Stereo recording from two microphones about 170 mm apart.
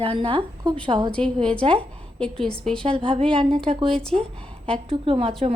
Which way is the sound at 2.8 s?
30° right (ahead or behind).